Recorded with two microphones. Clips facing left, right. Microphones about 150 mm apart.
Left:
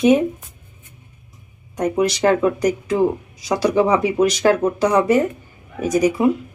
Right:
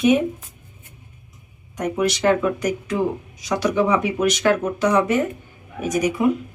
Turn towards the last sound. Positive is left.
turn(degrees=35)  # may be behind; listen again after turning